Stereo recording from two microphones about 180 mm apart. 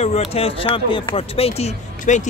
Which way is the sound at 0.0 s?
35° left (ahead or behind).